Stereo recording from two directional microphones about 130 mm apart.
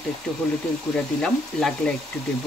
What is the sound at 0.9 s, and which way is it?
Speech, 5° left (ahead or behind).